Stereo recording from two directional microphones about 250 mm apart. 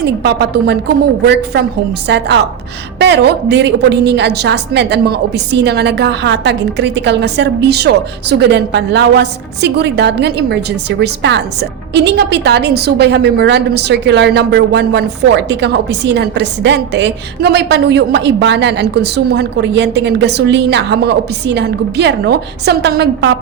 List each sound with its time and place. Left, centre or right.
0.0 s a woman's voice: right